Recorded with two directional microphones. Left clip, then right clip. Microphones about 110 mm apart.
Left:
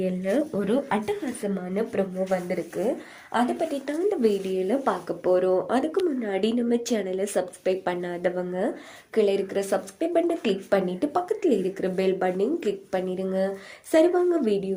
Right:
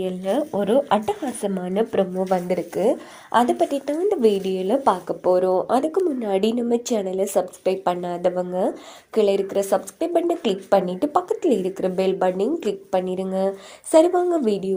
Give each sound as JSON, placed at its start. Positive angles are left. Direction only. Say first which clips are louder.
{"t": 0.3, "sound": "speech", "louder": "right 5 dB", "side_deg": -25}
{"t": 1.4, "sound": "speech", "louder": "right 5 dB", "side_deg": -55}
{"t": 3.3, "sound": "speech", "louder": "right 7 dB", "side_deg": -80}
{"t": 3.8, "sound": "speech", "louder": "right 3 dB", "side_deg": -30}
{"t": 5.0, "sound": "speech", "louder": "right 3 dB", "side_deg": -5}
{"t": 6.4, "sound": "speech", "louder": "right 3 dB", "side_deg": -25}